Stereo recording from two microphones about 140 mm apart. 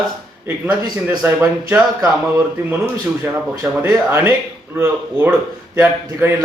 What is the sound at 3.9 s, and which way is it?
A man's voice, 20° right (ahead or behind).